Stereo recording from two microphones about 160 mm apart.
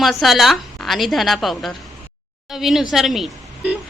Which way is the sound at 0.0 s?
Centre (ahead or behind).